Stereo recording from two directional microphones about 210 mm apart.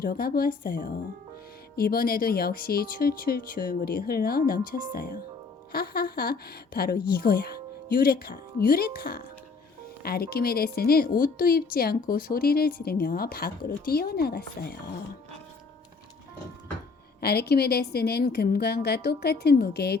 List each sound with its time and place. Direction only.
0.0 s a woman's voice: 45° left (ahead or behind)
17.2 s a woman's voice: 50° left (ahead or behind)